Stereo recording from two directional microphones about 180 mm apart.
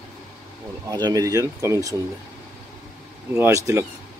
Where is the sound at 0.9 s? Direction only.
20° right (ahead or behind).